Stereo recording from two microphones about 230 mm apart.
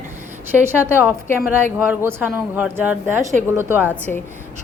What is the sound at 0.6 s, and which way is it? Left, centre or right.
Speech, centre.